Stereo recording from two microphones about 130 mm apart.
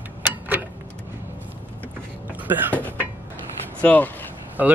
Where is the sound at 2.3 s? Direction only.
15° right (ahead or behind).